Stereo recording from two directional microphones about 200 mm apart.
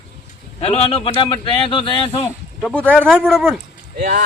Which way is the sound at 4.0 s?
50° right (ahead or behind).